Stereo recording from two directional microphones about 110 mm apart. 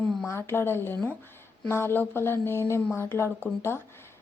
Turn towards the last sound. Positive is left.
turn(degrees=20)  # may be behind; listen again after turning